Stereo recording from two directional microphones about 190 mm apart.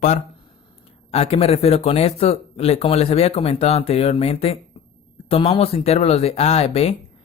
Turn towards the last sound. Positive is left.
turn(degrees=35)  # may be behind; listen again after turning